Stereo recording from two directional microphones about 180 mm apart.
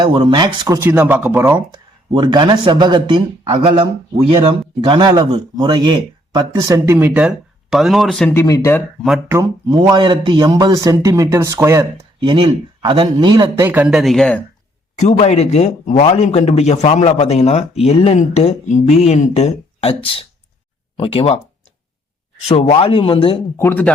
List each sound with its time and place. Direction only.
0.0 s speech: 25° right (ahead or behind)
0.8 s a man's voice: 10° right (ahead or behind)
2.1 s a man's voice: 25° right (ahead or behind); by 8.4 s 5° left (ahead or behind)
8.4 s speech: 15° left (ahead or behind)
9.3 s speech: 20° right (ahead or behind)
12.3 s speech: 25° right (ahead or behind)
13.7 s speech: 5° right (ahead or behind)
14.9 s a man's voice: 40° left (ahead or behind)
22.4 s a man's voice: 35° left (ahead or behind)
23.6 s speech: 10° left (ahead or behind)